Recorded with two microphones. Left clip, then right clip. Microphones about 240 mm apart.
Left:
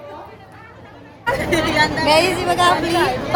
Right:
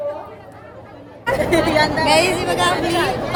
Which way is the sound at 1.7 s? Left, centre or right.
Right.